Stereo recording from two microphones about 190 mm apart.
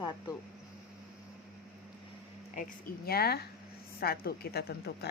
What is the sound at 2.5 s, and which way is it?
A woman's voice, 45° left (ahead or behind).